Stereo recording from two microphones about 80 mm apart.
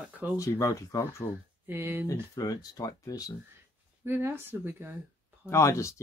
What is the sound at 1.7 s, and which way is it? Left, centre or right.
Speech, right.